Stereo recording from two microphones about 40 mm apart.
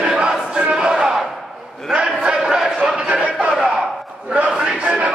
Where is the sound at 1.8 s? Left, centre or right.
Centre.